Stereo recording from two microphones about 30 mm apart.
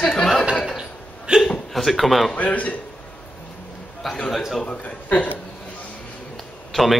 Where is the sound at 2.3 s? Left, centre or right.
Left.